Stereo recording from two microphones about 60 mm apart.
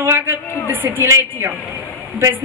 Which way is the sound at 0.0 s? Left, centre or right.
Right.